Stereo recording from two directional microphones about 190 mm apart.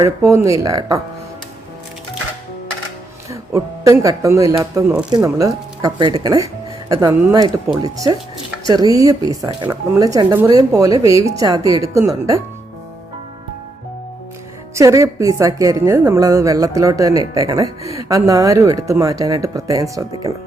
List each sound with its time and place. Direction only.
0.0 s a woman's voice: 15° right (ahead or behind)
3.2 s a woman's voice: 15° right (ahead or behind)
14.8 s a woman's voice: 15° right (ahead or behind)